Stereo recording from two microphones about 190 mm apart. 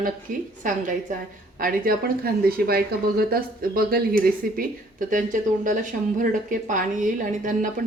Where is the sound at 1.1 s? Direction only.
45° right (ahead or behind).